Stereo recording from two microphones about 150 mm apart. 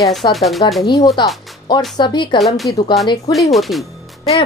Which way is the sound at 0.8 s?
30° left (ahead or behind).